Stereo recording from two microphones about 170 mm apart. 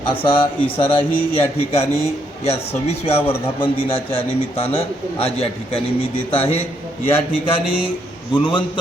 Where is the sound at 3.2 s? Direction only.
10° left (ahead or behind).